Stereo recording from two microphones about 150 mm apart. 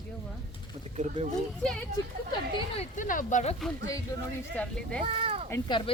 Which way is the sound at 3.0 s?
60° left (ahead or behind).